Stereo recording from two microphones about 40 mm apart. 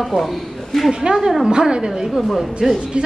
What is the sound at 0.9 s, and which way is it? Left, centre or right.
Speech, centre.